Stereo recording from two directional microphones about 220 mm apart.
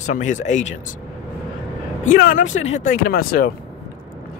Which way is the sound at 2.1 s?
40° left (ahead or behind).